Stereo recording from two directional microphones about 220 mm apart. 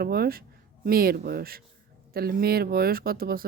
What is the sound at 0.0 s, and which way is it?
Speech, 45° right (ahead or behind).